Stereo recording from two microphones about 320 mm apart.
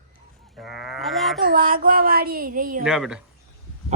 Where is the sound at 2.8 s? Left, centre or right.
Centre.